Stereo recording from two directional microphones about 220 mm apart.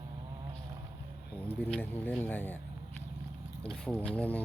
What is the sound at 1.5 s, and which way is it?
Speech, 5° left (ahead or behind).